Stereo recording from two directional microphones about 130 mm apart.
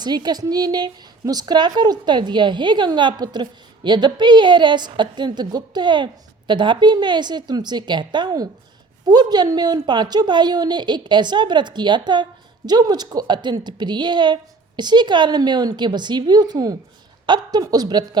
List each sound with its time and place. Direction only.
0.0 s a woman's voice: 30° right (ahead or behind)